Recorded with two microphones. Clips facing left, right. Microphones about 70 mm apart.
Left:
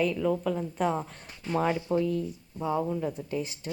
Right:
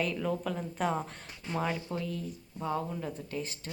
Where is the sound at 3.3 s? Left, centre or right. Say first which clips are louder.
Left 5 dB; centre.